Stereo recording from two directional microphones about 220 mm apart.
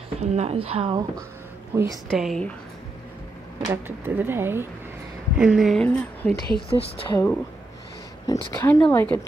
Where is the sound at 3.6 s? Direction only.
10° right (ahead or behind).